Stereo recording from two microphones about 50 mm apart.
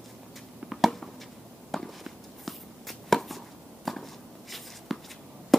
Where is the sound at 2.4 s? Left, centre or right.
Centre.